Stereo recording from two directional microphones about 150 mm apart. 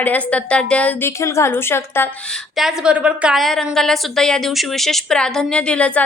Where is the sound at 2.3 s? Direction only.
Centre (ahead or behind).